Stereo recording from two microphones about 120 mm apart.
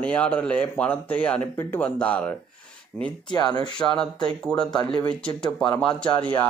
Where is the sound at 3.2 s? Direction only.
35° left (ahead or behind).